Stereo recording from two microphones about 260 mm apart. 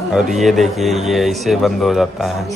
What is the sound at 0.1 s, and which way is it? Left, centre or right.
Speech, centre.